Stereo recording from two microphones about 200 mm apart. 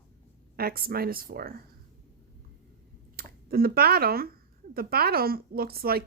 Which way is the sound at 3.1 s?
50° right (ahead or behind).